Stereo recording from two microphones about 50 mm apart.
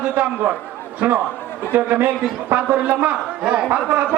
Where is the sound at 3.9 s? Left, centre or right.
Right.